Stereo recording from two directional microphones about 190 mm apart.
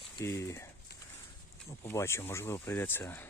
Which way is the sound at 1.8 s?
15° left (ahead or behind).